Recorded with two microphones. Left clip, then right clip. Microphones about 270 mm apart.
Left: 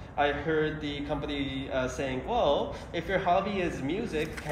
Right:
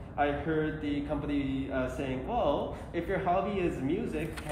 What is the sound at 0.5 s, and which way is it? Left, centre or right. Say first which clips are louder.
A man's voice: left 3 dB; left.